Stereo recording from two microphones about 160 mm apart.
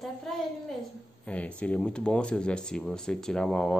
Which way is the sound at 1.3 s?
10° left (ahead or behind).